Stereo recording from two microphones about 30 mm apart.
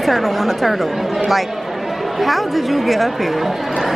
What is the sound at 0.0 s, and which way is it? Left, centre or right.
Speech, centre.